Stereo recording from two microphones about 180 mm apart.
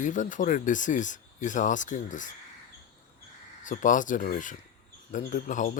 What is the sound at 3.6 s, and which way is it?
Speech, 45° left (ahead or behind).